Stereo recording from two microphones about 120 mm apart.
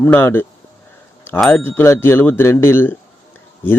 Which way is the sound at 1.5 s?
20° left (ahead or behind).